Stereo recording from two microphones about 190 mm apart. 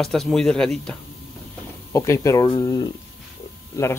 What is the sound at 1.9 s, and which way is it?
Speech, 15° left (ahead or behind).